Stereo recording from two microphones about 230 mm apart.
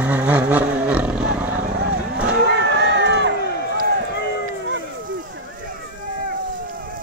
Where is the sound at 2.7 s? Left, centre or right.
Right.